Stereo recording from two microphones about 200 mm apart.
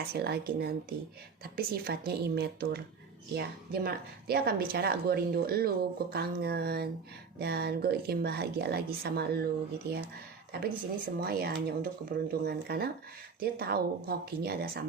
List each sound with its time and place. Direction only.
0.0 s a woman's voice: 50° right (ahead or behind)
10.5 s a woman's voice: 50° right (ahead or behind)